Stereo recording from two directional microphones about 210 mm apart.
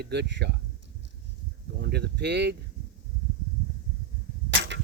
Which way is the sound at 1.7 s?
50° right (ahead or behind).